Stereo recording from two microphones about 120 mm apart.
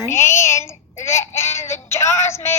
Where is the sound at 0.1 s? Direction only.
25° left (ahead or behind).